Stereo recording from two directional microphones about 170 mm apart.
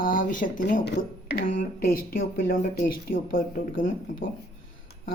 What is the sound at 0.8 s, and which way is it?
Speech, 65° left (ahead or behind).